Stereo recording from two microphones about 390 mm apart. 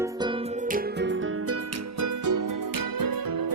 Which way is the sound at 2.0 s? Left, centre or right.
Right.